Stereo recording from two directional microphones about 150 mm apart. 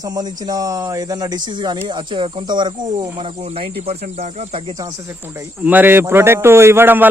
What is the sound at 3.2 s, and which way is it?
Speech, 40° right (ahead or behind).